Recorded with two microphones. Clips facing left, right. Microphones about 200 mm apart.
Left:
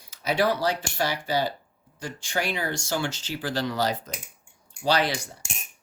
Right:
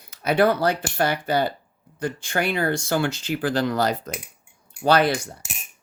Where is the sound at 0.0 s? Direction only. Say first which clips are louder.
Right 5 dB; 55° right (ahead or behind).